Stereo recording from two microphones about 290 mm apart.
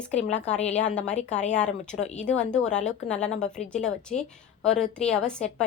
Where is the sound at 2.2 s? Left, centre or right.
Centre.